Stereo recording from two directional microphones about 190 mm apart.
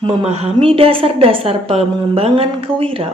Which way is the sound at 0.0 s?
35° right (ahead or behind).